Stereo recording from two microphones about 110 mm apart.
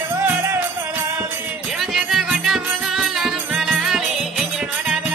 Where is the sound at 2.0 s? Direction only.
5° right (ahead or behind).